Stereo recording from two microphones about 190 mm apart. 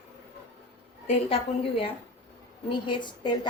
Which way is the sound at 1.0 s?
35° left (ahead or behind).